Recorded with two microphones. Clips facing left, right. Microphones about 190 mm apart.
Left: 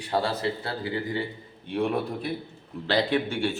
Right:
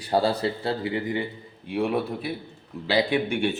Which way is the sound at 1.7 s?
5° right (ahead or behind).